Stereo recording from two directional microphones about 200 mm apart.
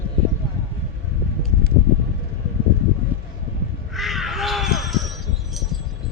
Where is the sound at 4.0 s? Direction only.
Centre (ahead or behind).